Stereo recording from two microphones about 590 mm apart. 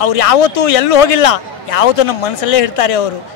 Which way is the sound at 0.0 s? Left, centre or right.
Left.